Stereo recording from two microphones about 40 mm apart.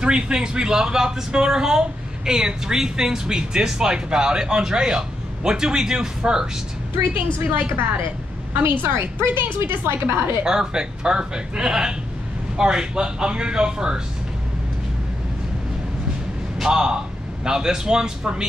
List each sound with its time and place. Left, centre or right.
0.0 s speech: right
8.6 s a woman's voice: right
9.2 s a woman's voice: right
10.4 s speech: centre
16.6 s a man's voice: right